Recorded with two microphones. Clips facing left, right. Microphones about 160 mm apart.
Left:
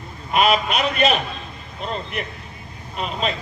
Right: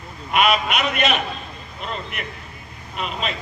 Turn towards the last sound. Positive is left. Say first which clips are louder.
# left 2 dB
turn(degrees=35)  # may be behind; listen again after turning